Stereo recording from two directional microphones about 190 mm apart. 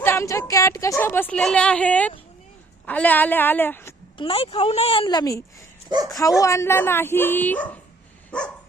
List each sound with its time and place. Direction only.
0.0 s a woman's voice: 15° left (ahead or behind)
4.2 s a woman's voice: 30° left (ahead or behind); by 7.8 s 10° left (ahead or behind)